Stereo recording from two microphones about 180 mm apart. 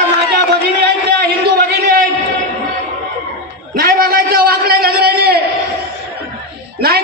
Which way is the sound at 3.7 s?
55° right (ahead or behind).